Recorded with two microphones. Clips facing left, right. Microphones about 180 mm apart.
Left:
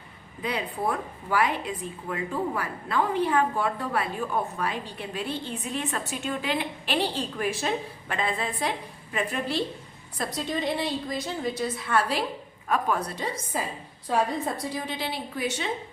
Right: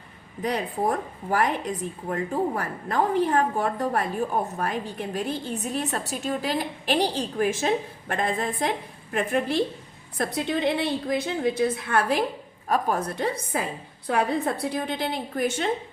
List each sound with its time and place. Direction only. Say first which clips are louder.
0.4 s a woman's voice: right 3 dB; 40° right (ahead or behind)
12.6 s a woman's voice: right 2 dB; 40° right (ahead or behind)